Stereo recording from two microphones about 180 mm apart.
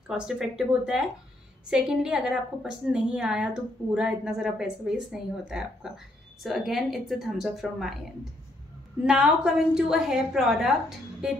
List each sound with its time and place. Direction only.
0.1 s a woman's voice: 5° right (ahead or behind)
9.0 s a woman's voice: 5° right (ahead or behind)